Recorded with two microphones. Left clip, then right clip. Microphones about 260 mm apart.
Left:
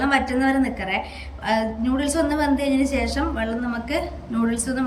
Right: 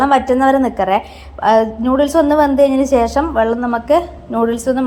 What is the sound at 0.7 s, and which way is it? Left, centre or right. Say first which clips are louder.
Speech: right 11 dB; right.